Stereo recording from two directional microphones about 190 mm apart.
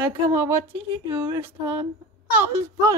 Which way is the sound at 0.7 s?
10° right (ahead or behind).